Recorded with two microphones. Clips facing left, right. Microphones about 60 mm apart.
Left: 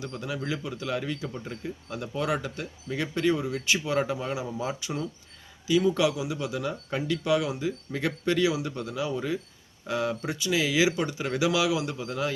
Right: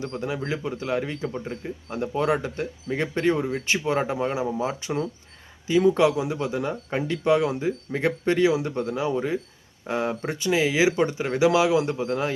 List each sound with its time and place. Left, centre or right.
0.0 s speech: right
5.6 s speech: right